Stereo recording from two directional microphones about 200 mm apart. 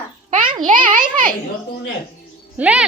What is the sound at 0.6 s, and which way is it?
Speech, 40° right (ahead or behind).